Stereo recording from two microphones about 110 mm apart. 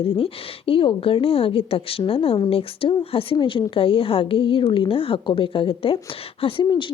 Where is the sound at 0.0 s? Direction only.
55° left (ahead or behind).